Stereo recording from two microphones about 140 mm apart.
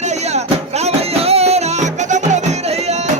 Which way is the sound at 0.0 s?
55° right (ahead or behind).